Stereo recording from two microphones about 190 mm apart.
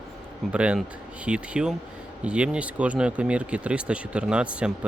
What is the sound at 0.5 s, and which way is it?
Speech, 5° right (ahead or behind).